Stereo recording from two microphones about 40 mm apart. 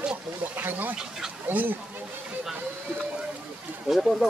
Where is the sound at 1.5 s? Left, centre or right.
Right.